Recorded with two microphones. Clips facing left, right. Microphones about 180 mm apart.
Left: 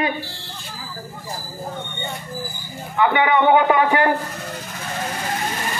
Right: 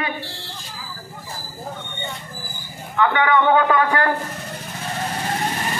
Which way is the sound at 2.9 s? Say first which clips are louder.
Left 1 dB; 15° left (ahead or behind).